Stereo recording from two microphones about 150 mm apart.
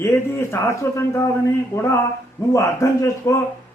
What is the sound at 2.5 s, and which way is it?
Speech, 20° left (ahead or behind).